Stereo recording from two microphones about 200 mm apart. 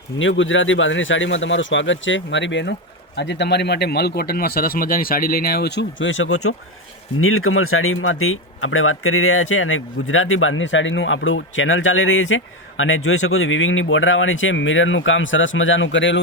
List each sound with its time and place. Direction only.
0.2 s a man's voice: 75° left (ahead or behind)